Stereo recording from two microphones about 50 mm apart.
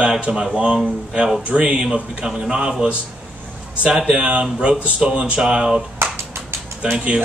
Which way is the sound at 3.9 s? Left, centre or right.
Centre.